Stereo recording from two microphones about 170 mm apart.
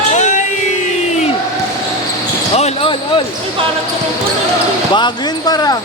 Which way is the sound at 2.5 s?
40° left (ahead or behind).